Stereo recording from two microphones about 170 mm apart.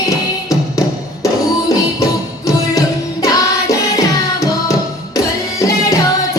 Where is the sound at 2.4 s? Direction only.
20° left (ahead or behind).